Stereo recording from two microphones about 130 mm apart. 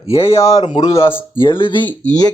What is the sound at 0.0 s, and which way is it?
Speech, 45° left (ahead or behind).